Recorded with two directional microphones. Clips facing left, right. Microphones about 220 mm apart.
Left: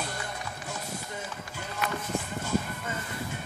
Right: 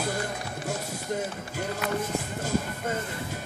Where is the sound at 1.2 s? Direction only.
40° right (ahead or behind).